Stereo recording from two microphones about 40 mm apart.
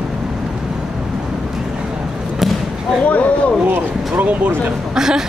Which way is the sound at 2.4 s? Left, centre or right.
Centre.